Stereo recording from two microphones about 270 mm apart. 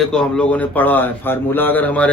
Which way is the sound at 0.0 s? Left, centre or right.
Centre.